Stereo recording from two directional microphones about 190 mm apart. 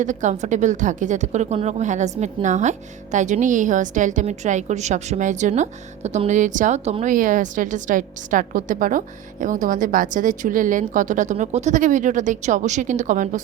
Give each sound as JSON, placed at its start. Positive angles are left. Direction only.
{"t": 0.0, "sound": "speech", "side_deg": -40}